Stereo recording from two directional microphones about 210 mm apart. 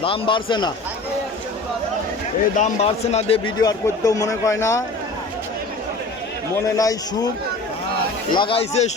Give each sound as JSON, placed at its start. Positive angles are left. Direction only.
{"t": 0.0, "sound": "speech", "side_deg": 25}
{"t": 2.6, "sound": "speech", "side_deg": 35}
{"t": 6.7, "sound": "speech", "side_deg": 15}
{"t": 8.3, "sound": "speech", "side_deg": 25}